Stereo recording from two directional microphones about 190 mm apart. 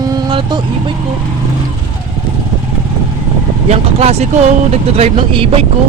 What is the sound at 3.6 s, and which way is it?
Speech, 35° right (ahead or behind).